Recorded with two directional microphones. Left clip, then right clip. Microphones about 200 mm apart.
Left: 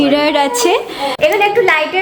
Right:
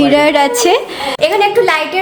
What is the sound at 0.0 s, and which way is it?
A woman's voice, 10° right (ahead or behind).